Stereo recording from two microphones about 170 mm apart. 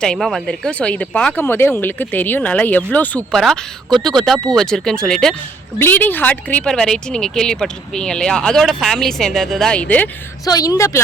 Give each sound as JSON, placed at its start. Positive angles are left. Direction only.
{"t": 0.0, "sound": "speech", "side_deg": 0}
{"t": 10.4, "sound": "a woman's voice", "side_deg": 20}